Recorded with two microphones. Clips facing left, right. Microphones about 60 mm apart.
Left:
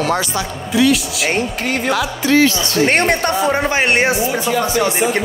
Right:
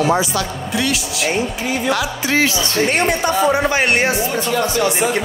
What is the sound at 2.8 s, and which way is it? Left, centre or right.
Speech, left.